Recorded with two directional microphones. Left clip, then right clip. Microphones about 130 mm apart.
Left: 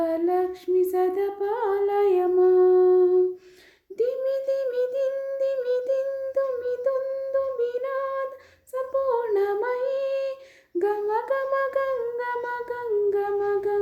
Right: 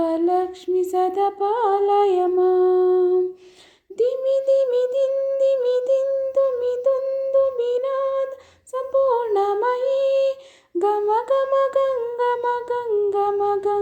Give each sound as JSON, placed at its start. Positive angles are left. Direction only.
{"t": 0.0, "sound": "music", "side_deg": -20}
{"t": 3.9, "sound": "humming", "side_deg": -20}
{"t": 8.7, "sound": "music", "side_deg": -20}